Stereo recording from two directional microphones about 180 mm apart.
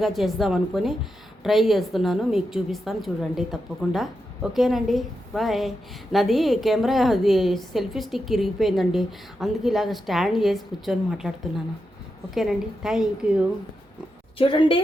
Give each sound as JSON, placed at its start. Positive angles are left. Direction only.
{"t": 0.0, "sound": "a woman's voice", "side_deg": 0}
{"t": 14.3, "sound": "a woman's voice", "side_deg": 30}